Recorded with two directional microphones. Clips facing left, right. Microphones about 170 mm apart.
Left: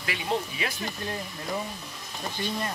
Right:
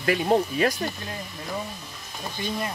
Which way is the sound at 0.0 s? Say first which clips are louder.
Right 8 dB; 45° right (ahead or behind).